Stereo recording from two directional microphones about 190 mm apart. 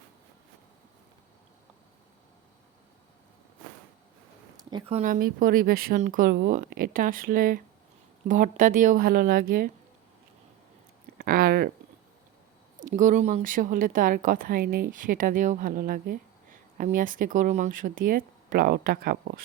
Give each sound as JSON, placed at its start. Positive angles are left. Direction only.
{"t": 4.9, "sound": "a woman's voice", "side_deg": -40}
{"t": 11.2, "sound": "a woman's voice", "side_deg": -50}
{"t": 12.8, "sound": "a woman's voice", "side_deg": -40}